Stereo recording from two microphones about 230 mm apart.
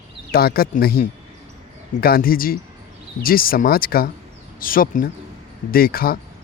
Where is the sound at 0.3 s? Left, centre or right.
Left.